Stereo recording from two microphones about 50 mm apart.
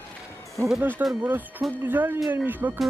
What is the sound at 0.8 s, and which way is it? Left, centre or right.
Speech, right.